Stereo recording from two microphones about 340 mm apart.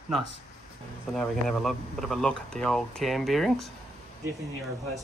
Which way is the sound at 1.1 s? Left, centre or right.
Centre.